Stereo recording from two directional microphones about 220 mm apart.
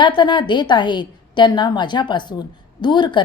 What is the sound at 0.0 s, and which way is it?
A woman's voice, 20° left (ahead or behind).